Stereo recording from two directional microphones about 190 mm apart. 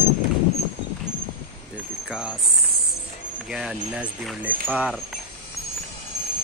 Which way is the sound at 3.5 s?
5° right (ahead or behind).